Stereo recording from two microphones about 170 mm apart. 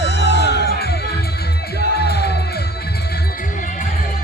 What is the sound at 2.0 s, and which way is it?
Music, 75° left (ahead or behind).